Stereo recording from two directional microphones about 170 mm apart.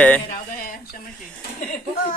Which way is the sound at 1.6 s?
50° left (ahead or behind).